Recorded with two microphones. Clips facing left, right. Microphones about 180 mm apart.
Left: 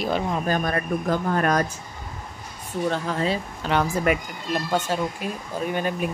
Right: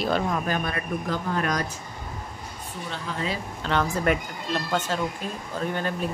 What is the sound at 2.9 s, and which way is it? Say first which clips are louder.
Speech: left 2 dB; 45° left (ahead or behind).